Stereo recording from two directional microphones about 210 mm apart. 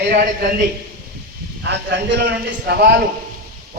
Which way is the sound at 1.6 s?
55° right (ahead or behind).